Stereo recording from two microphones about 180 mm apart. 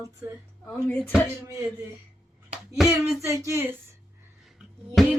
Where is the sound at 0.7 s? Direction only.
5° left (ahead or behind).